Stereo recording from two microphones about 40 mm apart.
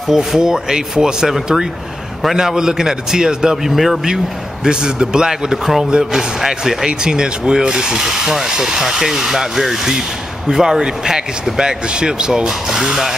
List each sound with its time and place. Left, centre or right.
0.1 s speech: centre
3.7 s speech: centre
4.6 s speech: right